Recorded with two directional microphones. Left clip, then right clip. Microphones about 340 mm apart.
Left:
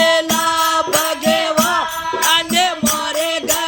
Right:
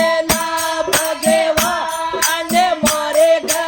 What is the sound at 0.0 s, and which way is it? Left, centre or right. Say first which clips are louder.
Music: left 2 dB; centre.